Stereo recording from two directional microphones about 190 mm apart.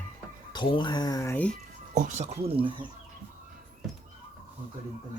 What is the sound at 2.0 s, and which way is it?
Speech, 40° right (ahead or behind).